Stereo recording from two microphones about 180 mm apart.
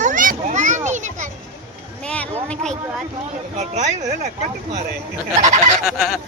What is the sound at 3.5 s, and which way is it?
Speech, 40° right (ahead or behind).